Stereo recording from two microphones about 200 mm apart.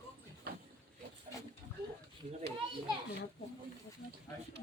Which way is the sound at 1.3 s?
15° left (ahead or behind).